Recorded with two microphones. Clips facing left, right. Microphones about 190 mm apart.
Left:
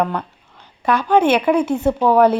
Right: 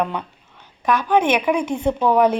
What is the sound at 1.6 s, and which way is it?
Speech, 5° left (ahead or behind).